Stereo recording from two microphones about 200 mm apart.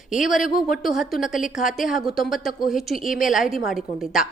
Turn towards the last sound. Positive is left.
turn(degrees=0)  # may be behind; listen again after turning